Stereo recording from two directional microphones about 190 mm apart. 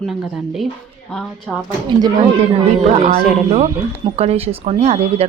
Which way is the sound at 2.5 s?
35° right (ahead or behind).